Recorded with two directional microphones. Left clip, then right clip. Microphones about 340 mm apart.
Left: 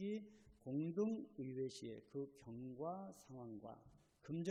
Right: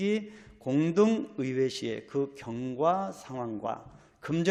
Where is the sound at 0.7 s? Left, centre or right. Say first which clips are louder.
Right 18 dB; right.